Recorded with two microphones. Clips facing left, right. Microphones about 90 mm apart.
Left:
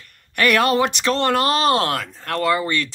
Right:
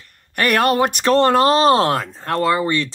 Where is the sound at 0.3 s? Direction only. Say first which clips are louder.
Right 1 dB; 40° right (ahead or behind).